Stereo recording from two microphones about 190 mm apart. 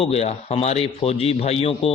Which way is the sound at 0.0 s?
35° left (ahead or behind).